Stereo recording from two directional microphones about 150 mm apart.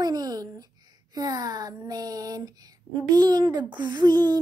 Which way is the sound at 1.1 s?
25° right (ahead or behind).